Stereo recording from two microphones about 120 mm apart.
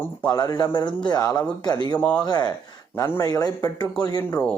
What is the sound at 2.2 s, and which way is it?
A man's voice, 35° left (ahead or behind).